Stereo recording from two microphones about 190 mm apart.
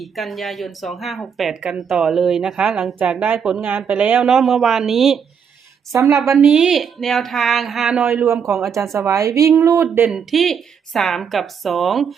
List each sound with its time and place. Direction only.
0.0 s speech: centre (ahead or behind)
5.9 s speech: 15° right (ahead or behind)
6.3 s speech: centre (ahead or behind)
8.1 s speech: 15° right (ahead or behind)
10.1 s speech: centre (ahead or behind)